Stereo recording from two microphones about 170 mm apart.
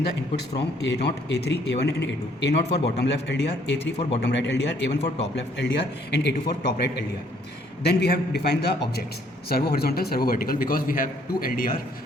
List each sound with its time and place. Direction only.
0.8 s a man's voice: 80° left
4.9 s a man's voice: 35° left (ahead or behind)
5.5 s a man's voice: 80° left; by 11.7 s 55° left (ahead or behind)